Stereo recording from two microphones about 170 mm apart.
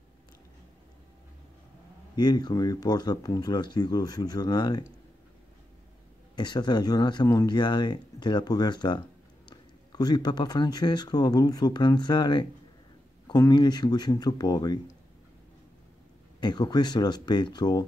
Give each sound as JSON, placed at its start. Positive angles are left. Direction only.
{"t": 2.1, "sound": "speech", "side_deg": 25}
{"t": 6.3, "sound": "speech", "side_deg": 25}
{"t": 16.3, "sound": "speech", "side_deg": 25}